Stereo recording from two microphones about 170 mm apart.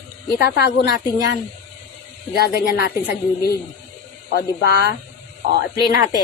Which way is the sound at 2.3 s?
70° left (ahead or behind).